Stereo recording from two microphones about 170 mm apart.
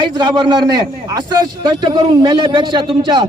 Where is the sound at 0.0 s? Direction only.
25° right (ahead or behind).